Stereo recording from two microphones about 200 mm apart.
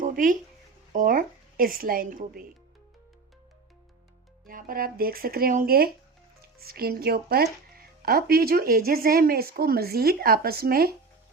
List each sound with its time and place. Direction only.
0.0 s a sound: 40° right (ahead or behind)
0.9 s speech: 45° right (ahead or behind)
4.4 s speech: 45° right (ahead or behind)